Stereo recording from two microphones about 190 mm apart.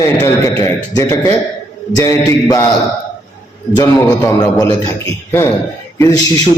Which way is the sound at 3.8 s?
20° left (ahead or behind).